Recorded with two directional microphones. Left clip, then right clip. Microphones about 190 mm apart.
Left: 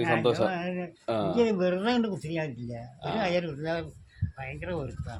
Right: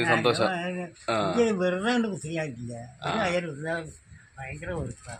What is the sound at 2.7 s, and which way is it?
Speech, 10° left (ahead or behind).